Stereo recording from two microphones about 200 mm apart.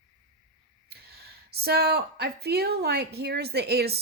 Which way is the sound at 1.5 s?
50° right (ahead or behind).